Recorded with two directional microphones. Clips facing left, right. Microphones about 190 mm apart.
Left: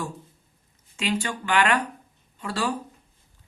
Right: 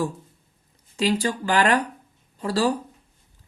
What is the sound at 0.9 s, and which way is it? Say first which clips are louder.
Speech: right 5 dB; 35° right (ahead or behind).